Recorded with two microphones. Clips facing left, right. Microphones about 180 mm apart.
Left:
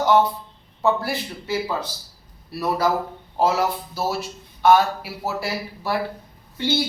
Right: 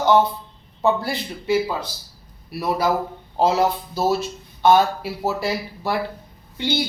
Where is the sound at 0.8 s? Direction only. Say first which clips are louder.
Right 1 dB; 15° right (ahead or behind).